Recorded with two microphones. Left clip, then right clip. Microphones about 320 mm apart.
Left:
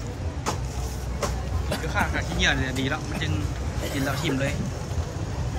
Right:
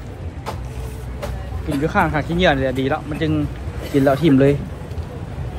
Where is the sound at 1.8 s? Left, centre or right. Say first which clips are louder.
Right 9 dB; centre.